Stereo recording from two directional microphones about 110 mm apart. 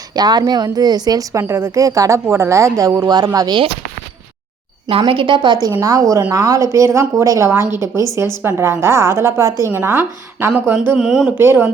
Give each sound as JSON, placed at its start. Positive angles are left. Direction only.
{"t": 0.1, "sound": "a woman's voice", "side_deg": -40}
{"t": 4.9, "sound": "speech", "side_deg": -55}
{"t": 5.8, "sound": "a woman's voice", "side_deg": -30}
{"t": 10.9, "sound": "speech", "side_deg": -5}
{"t": 11.3, "sound": "a woman's voice", "side_deg": -20}